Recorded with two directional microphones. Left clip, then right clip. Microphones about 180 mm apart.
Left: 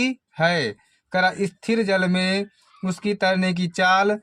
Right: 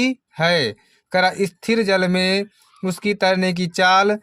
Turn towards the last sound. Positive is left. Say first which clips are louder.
# right 3 dB
turn(degrees=-30)  # may be behind; listen again after turning